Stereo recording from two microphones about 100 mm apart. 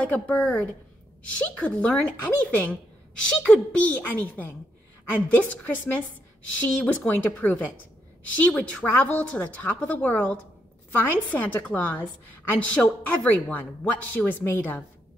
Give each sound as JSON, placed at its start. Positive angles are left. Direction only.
{"t": 0.0, "sound": "a woman's voice", "side_deg": 15}